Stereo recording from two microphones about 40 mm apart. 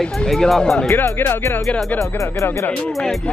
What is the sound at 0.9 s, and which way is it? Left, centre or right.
Speech, left.